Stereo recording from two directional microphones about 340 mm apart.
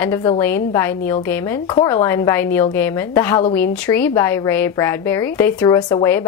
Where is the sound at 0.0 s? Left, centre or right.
Centre.